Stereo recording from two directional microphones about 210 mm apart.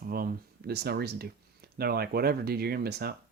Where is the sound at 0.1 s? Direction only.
45° right (ahead or behind).